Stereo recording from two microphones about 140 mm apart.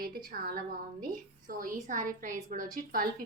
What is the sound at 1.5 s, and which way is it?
A woman's voice, 75° right (ahead or behind).